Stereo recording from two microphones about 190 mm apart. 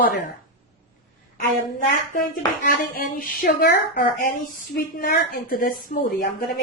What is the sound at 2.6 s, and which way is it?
A woman's voice, 50° left (ahead or behind).